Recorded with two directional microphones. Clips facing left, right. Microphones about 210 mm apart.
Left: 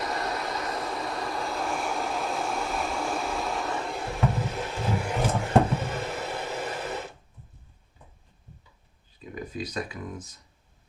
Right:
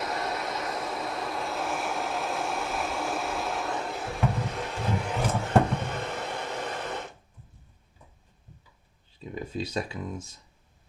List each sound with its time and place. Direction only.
0.0 s vehicle: centre (ahead or behind)
5.7 s a sound: 5° left (ahead or behind)
9.1 s speech: 25° right (ahead or behind)